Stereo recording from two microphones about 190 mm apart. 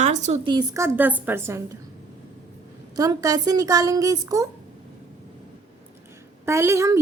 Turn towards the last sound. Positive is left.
turn(degrees=-15)  # may be behind; listen again after turning